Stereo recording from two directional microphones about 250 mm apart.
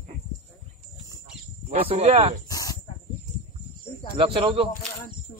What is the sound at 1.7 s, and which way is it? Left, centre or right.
Speech, right.